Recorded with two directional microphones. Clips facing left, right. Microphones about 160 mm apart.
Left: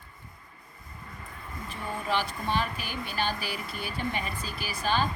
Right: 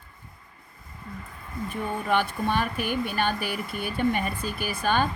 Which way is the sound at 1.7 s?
55° right (ahead or behind).